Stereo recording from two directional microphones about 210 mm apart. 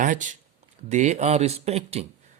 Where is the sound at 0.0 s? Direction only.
35° right (ahead or behind).